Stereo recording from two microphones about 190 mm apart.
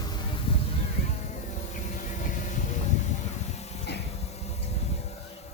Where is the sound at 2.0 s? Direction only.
40° left (ahead or behind).